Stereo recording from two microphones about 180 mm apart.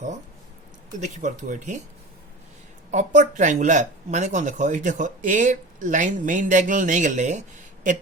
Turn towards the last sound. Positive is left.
turn(degrees=-45)  # may be behind; listen again after turning